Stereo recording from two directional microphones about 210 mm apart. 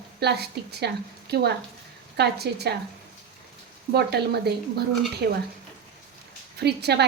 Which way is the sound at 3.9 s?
50° right (ahead or behind).